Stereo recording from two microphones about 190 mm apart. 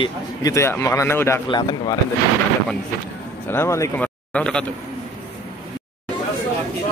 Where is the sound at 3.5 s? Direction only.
15° left (ahead or behind).